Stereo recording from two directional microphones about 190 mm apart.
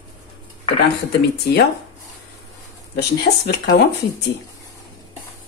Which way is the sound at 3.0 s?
60° left (ahead or behind).